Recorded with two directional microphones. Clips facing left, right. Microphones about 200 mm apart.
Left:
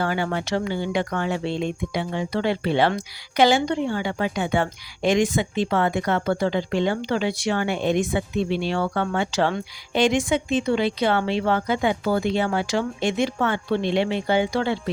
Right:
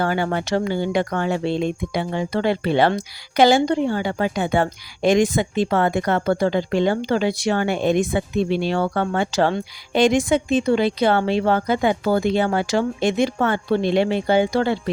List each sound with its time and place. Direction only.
0.0 s speech: 45° right (ahead or behind)